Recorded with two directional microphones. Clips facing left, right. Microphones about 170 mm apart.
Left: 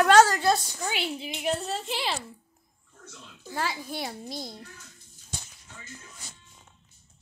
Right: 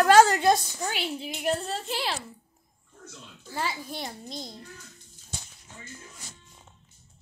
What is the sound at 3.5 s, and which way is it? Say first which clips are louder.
A woman's voice: left 1 dB; centre (ahead or behind).